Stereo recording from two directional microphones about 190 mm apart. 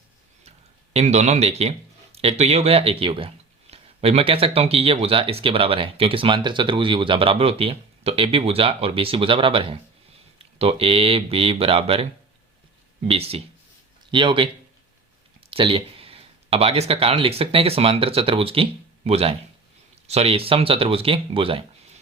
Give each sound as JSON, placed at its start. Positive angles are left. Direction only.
{"t": 0.9, "sound": "speech", "side_deg": -35}
{"t": 13.1, "sound": "speech", "side_deg": -30}